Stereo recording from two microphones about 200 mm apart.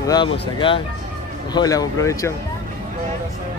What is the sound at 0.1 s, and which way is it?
Speech, 25° left (ahead or behind).